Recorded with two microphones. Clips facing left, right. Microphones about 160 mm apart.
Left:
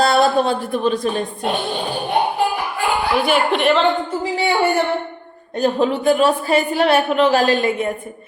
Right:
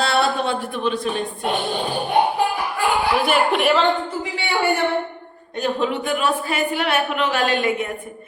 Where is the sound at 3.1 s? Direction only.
Centre (ahead or behind).